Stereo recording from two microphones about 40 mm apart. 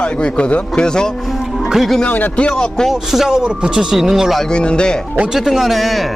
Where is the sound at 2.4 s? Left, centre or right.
Left.